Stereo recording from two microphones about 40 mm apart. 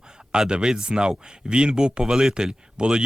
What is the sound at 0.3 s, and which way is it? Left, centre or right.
Speech, right.